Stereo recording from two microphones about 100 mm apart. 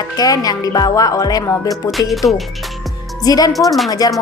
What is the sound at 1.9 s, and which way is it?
Speech, centre (ahead or behind).